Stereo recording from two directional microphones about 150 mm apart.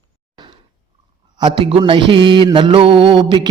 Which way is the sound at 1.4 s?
35° right (ahead or behind).